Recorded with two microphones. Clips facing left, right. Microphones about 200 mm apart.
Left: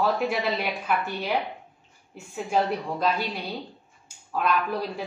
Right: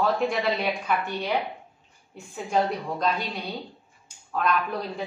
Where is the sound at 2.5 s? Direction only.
5° left (ahead or behind).